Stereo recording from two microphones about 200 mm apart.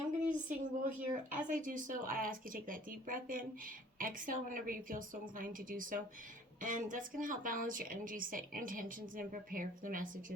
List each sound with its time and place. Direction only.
0.3 s speech: 40° right (ahead or behind)